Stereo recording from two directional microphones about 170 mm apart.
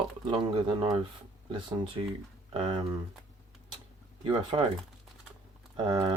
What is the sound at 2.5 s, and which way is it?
Speech, 30° right (ahead or behind).